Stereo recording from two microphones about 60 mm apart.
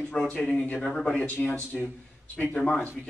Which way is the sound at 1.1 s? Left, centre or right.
Left.